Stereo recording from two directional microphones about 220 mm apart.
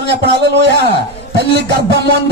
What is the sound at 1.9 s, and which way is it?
Speech, 50° right (ahead or behind).